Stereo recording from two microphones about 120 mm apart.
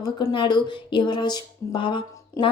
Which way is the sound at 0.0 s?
40° left (ahead or behind).